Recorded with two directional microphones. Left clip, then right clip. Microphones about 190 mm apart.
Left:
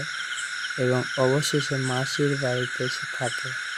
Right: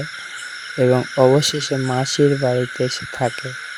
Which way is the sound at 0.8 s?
35° right (ahead or behind).